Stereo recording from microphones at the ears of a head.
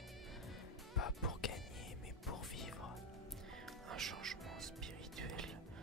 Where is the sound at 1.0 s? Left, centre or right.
Left.